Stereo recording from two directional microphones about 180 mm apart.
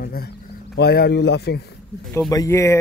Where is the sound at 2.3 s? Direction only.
20° left (ahead or behind).